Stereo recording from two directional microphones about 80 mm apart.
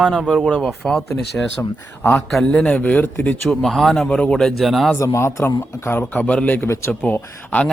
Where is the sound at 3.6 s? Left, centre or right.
Centre.